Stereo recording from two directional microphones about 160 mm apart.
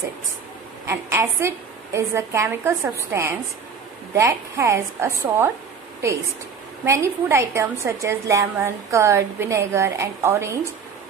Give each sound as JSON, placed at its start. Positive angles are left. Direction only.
{"t": 0.8, "sound": "a woman's voice", "side_deg": -15}